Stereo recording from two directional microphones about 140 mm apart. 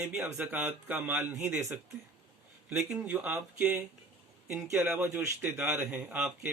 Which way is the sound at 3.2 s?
15° right (ahead or behind).